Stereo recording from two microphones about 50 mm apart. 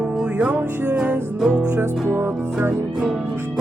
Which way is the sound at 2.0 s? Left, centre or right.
Right.